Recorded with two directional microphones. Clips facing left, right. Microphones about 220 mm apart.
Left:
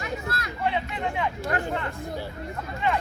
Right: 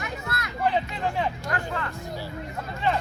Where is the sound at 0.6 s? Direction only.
35° right (ahead or behind).